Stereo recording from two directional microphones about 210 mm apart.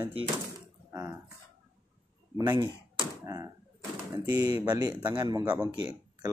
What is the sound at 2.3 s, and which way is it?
Speech, 20° right (ahead or behind).